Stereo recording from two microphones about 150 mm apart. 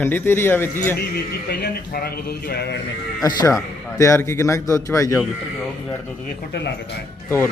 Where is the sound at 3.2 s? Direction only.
25° left (ahead or behind).